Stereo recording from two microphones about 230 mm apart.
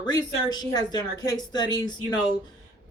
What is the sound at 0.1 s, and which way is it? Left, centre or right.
Speech, centre.